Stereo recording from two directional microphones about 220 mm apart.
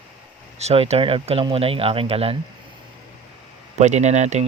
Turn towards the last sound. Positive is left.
turn(degrees=-30)  # may be behind; listen again after turning